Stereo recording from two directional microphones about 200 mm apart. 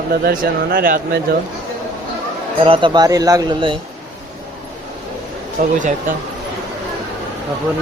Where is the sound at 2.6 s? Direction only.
25° right (ahead or behind).